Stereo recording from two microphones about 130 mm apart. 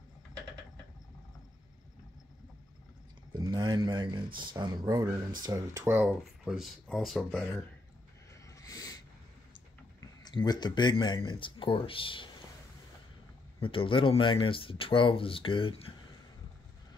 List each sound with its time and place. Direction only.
3.3 s speech: 30° right (ahead or behind)
6.4 s speech: centre (ahead or behind)
8.5 s a sound: 25° left (ahead or behind)
9.9 s speech: 30° left (ahead or behind)
13.6 s speech: 45° left (ahead or behind)